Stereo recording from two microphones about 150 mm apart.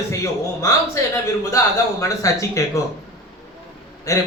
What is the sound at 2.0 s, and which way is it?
Speech, 20° left (ahead or behind).